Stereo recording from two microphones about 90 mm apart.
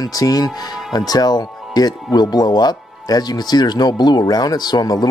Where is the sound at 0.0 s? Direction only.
45° left (ahead or behind).